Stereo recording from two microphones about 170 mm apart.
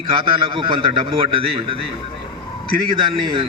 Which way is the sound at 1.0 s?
30° right (ahead or behind).